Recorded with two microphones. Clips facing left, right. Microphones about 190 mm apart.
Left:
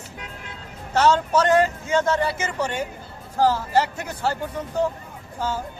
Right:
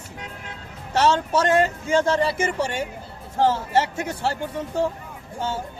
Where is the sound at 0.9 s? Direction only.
30° right (ahead or behind).